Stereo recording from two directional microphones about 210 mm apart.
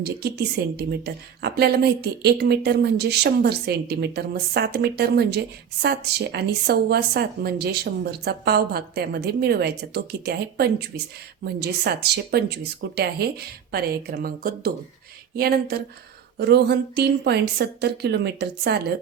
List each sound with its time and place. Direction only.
0.0 s a woman's voice: 50° right (ahead or behind)